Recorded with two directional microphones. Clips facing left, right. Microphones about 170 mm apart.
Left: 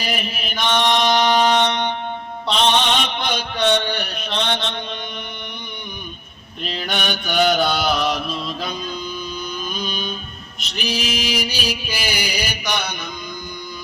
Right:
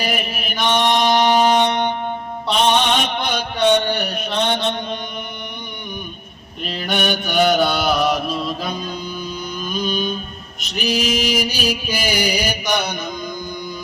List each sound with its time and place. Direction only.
0.0 s music: 55° right (ahead or behind)
0.5 s mantra: 10° right (ahead or behind)
1.0 s music: 10° right (ahead or behind)
1.7 s music: 45° right (ahead or behind)
2.6 s mantra: 50° right (ahead or behind)
3.6 s mantra: 10° right (ahead or behind)
3.8 s music: 50° right (ahead or behind)
6.6 s mantra: 5° right (ahead or behind)
7.0 s music: 50° right (ahead or behind)